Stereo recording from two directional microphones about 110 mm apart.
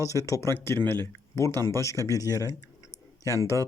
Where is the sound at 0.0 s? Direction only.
30° left (ahead or behind).